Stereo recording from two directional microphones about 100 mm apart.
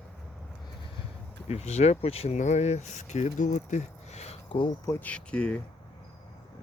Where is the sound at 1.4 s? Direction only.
90° left.